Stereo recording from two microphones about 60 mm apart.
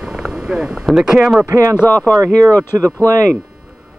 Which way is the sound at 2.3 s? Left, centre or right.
Right.